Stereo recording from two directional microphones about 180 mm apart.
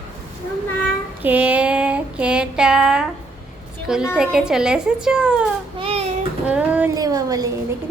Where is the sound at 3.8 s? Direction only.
5° right (ahead or behind).